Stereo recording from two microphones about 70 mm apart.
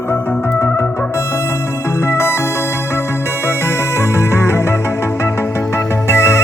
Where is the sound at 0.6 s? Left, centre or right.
Left.